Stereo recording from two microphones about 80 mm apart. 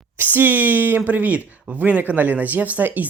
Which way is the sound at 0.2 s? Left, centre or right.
Right.